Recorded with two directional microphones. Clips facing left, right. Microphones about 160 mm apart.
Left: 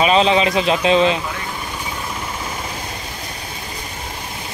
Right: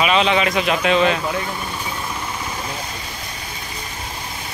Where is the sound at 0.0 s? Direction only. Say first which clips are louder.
Left 3 dB; 35° left (ahead or behind).